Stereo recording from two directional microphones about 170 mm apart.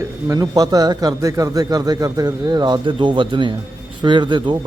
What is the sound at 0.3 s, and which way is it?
Speech, 20° right (ahead or behind).